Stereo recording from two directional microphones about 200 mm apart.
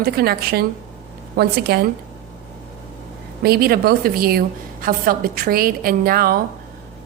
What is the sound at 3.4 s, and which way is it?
A woman's voice, 50° right (ahead or behind).